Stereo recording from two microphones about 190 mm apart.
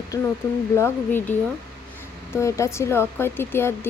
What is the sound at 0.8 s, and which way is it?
Speech, 10° left (ahead or behind).